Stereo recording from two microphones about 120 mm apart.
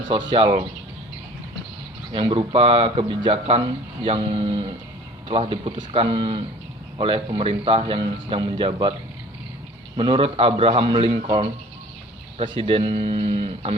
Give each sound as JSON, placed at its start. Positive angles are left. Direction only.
{"t": 0.3, "sound": "speech", "side_deg": -40}
{"t": 2.1, "sound": "a man's voice", "side_deg": -45}
{"t": 3.3, "sound": "a man's voice", "side_deg": -55}
{"t": 10.0, "sound": "a man's voice", "side_deg": -45}